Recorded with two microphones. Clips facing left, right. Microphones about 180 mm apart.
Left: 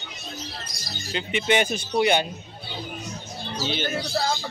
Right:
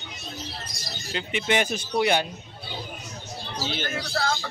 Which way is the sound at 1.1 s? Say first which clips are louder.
Left 2 dB; centre (ahead or behind).